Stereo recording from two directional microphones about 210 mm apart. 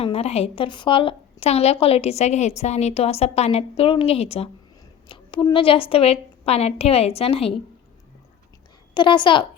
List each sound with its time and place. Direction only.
0.0 s a woman's voice: 30° left (ahead or behind)
9.0 s a woman's voice: 20° left (ahead or behind)